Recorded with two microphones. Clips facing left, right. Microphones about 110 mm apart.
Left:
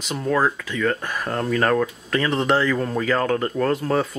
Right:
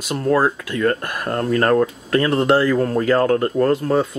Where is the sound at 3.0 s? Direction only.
35° right (ahead or behind).